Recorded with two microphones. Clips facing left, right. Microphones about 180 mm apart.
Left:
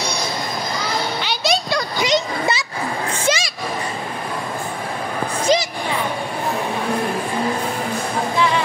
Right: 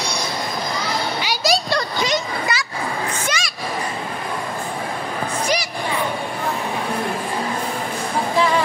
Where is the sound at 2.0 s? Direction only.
20° left (ahead or behind).